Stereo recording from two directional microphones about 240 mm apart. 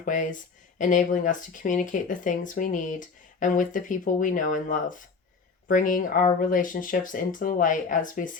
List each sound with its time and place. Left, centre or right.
0.0 s speech: left